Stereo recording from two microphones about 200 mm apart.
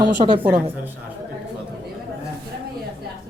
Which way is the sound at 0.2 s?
30° right (ahead or behind).